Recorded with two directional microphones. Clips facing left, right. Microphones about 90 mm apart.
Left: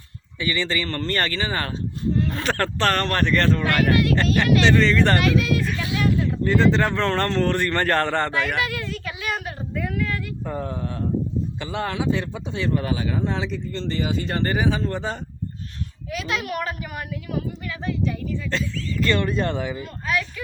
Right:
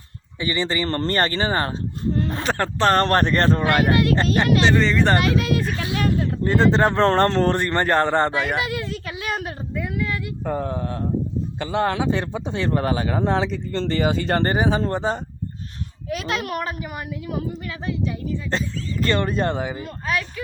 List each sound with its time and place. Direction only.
0.3 s speech: 30° right (ahead or behind)
2.1 s a sound: 35° right (ahead or behind)
2.4 s speech: 20° right (ahead or behind)
9.0 s a sound: 30° right (ahead or behind)
9.7 s a sound: 5° right (ahead or behind)
10.4 s speech: 45° right (ahead or behind)
14.5 s speech: 35° right (ahead or behind)
16.0 s speech: 45° right (ahead or behind)
16.6 s speech: 25° right (ahead or behind)
19.0 s speech: 40° right (ahead or behind)